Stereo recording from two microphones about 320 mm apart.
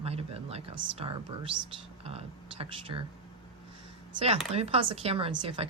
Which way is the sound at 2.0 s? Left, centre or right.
Centre.